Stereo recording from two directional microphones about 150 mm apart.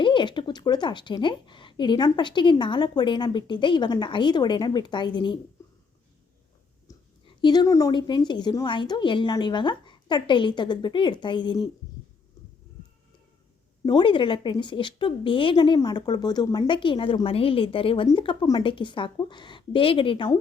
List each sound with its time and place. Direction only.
0.0 s a woman's voice: 30° left (ahead or behind)
7.3 s a woman's voice: 25° left (ahead or behind)
13.8 s a woman's voice: 30° left (ahead or behind)